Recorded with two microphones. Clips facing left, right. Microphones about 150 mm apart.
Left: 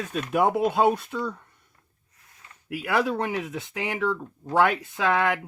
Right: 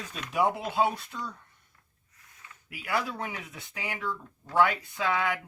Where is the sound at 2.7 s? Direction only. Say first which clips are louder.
Left 7 dB; 70° left (ahead or behind).